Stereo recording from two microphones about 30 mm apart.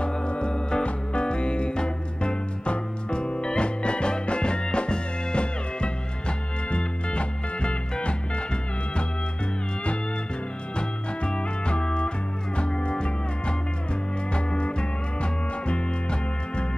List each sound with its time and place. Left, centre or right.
0.0 s music: left
10.8 s music: left